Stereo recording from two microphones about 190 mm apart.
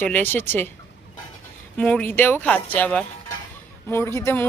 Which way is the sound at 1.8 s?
5° left (ahead or behind).